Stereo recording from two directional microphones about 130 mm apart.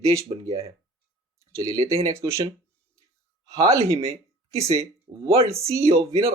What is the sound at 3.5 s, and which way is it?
Speech, 25° right (ahead or behind).